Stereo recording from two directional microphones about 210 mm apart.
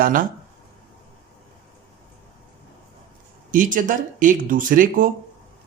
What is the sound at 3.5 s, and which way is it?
Speech, 40° right (ahead or behind).